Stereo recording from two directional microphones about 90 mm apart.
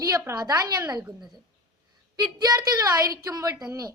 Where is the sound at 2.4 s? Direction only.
45° right (ahead or behind).